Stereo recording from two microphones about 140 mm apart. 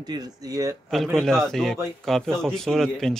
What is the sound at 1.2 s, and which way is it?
Speech, 5° left (ahead or behind).